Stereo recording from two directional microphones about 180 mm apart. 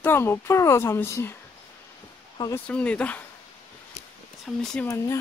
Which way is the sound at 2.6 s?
5° left (ahead or behind).